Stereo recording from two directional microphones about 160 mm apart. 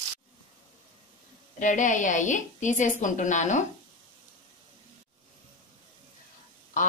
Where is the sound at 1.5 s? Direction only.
50° left (ahead or behind).